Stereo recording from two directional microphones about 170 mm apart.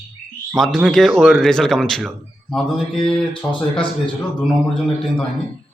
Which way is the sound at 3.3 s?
30° left (ahead or behind).